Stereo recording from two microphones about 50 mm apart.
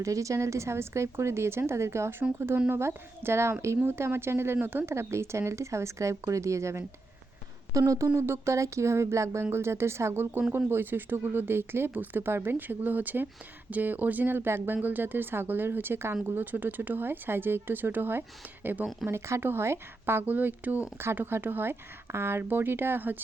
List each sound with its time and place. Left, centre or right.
0.0 s speech: right
4.9 s speech: right
7.9 s speech: right
10.7 s speech: right
12.5 s speech: right
14.8 s speech: right
19.0 s speech: right
20.2 s speech: right
21.2 s speech: right